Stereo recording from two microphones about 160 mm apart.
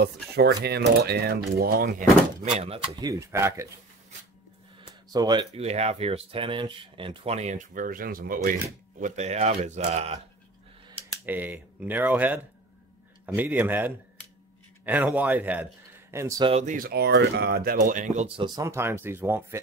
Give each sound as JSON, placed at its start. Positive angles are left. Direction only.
{"t": 0.0, "sound": "speech", "side_deg": -90}
{"t": 2.6, "sound": "speech", "side_deg": -40}
{"t": 3.0, "sound": "speech", "side_deg": -20}
{"t": 5.1, "sound": "speech", "side_deg": -25}
{"t": 5.5, "sound": "speech", "side_deg": -40}
{"t": 9.0, "sound": "speech", "side_deg": -45}
{"t": 11.2, "sound": "a man's voice", "side_deg": -10}
{"t": 16.6, "sound": "speech", "side_deg": -65}